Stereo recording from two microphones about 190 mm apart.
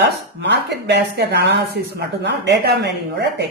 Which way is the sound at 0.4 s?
65° right (ahead or behind).